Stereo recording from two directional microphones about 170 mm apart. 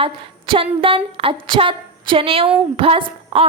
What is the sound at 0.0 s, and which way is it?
A woman's voice, 30° right (ahead or behind).